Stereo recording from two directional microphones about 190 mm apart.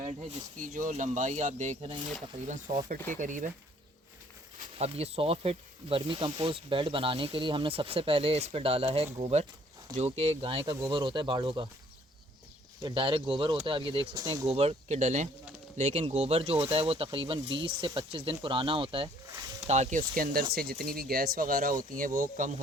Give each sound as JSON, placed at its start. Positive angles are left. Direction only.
{"t": 0.6, "sound": "speech", "side_deg": -45}
{"t": 4.8, "sound": "speech", "side_deg": -35}
{"t": 12.8, "sound": "speech", "side_deg": -25}
{"t": 14.4, "sound": "speech", "side_deg": -30}